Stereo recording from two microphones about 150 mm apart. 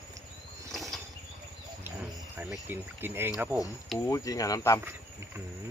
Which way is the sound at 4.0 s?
20° left (ahead or behind).